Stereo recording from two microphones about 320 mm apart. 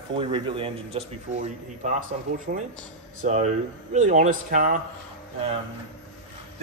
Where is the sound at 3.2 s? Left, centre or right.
Right.